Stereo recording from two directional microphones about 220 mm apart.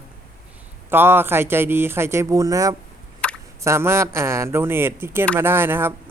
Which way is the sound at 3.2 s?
5° left (ahead or behind).